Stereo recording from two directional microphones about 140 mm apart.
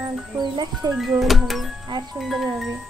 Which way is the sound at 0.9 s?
Centre (ahead or behind).